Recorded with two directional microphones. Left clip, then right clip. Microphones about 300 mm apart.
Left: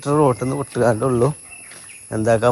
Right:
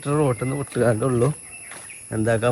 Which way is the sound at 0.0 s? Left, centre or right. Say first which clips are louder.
Left 5 dB; centre.